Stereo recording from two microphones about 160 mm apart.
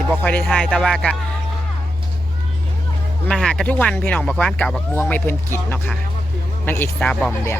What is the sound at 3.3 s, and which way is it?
Speech, 5° left (ahead or behind).